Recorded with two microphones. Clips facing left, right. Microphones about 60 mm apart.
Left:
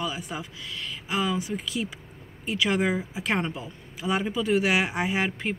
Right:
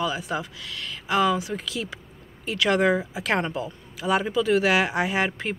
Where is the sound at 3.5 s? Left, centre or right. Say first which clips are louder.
Right 7 dB; right.